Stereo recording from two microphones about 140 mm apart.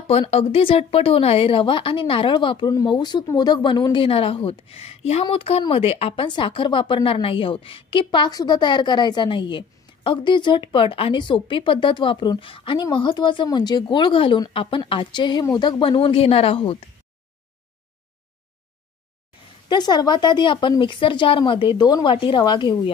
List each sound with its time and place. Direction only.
0.1 s speech: 45° left (ahead or behind)
19.7 s speech: 30° left (ahead or behind)